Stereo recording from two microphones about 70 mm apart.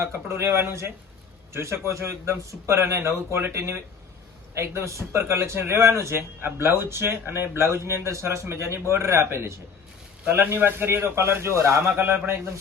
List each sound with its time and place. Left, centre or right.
0.0 s speech: right
11.9 s speech: right